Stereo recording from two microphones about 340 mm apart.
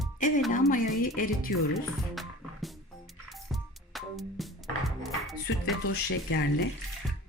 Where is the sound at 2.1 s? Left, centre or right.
Centre.